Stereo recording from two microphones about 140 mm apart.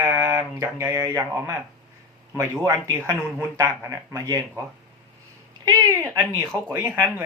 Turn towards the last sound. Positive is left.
turn(degrees=-15)  # may be behind; listen again after turning